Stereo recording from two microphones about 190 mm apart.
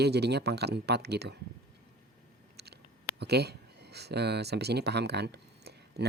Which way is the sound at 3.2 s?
60° right (ahead or behind).